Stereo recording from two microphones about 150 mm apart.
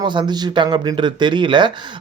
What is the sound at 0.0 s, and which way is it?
Speech, 30° right (ahead or behind).